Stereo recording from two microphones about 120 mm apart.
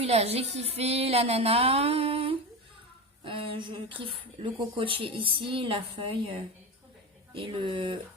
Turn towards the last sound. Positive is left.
turn(degrees=-45)  # may be behind; listen again after turning